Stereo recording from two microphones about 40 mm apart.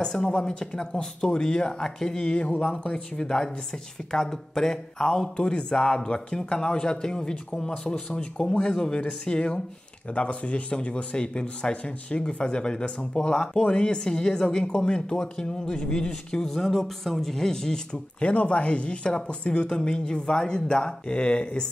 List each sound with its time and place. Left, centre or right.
0.0 s speech: left
8.1 s speech: left
18.2 s speech: left